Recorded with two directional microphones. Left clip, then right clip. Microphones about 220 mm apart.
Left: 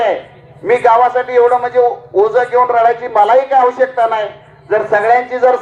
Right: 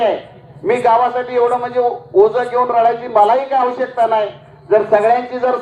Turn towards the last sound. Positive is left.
turn(degrees=25)  # may be behind; listen again after turning